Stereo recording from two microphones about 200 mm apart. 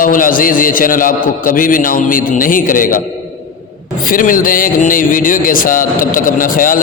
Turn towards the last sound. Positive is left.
turn(degrees=45)  # may be behind; listen again after turning